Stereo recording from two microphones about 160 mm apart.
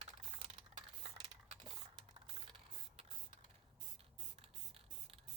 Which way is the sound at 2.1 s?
35° right (ahead or behind).